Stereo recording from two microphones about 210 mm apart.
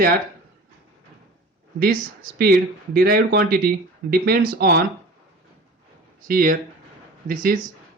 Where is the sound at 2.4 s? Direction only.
50° right (ahead or behind).